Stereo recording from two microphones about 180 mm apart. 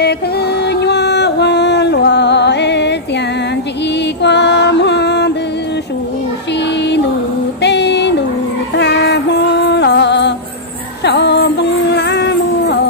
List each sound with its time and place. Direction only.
0.0 s music: 65° left (ahead or behind)
4.2 s music: 75° left (ahead or behind)
7.6 s a sound: 70° left (ahead or behind)
8.7 s music: 70° left (ahead or behind)